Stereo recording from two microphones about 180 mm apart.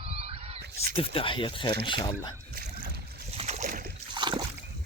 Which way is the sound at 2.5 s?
60° right (ahead or behind).